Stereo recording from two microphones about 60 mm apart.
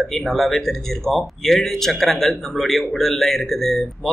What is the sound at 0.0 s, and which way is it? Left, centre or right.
Speech, centre.